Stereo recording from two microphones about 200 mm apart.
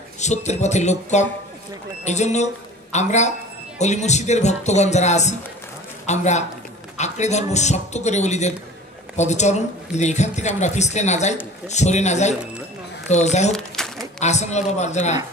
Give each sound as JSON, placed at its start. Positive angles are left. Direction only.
{"t": 0.2, "sound": "speech", "side_deg": 35}
{"t": 13.5, "sound": "crumpling", "side_deg": 0}
{"t": 14.2, "sound": "speech", "side_deg": 35}